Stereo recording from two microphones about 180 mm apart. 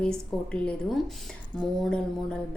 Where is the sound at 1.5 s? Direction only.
5° left (ahead or behind).